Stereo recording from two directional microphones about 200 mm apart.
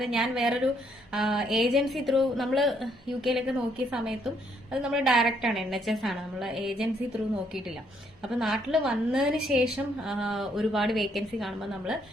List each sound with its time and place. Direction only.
0.0 s a woman's voice: centre (ahead or behind)
8.2 s a woman's voice: centre (ahead or behind)